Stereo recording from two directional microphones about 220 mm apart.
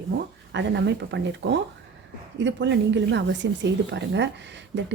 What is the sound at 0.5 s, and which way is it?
A woman's voice, 55° right (ahead or behind).